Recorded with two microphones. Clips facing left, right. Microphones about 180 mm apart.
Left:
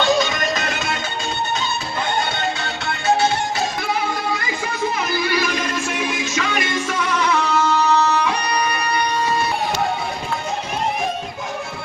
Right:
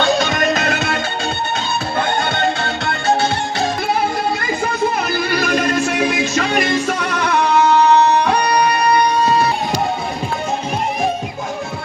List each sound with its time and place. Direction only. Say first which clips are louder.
0.0 s music: right 2 dB; 55° right (ahead or behind)
2.0 s music: right 4 dB; 55° right (ahead or behind)
4.9 s music: right 2 dB; 60° right (ahead or behind)
6.3 s music: right 5 dB; 35° right (ahead or behind)
6.8 s music: right 1 dB; 65° right (ahead or behind)
8.4 s music: right 6 dB; 35° right (ahead or behind)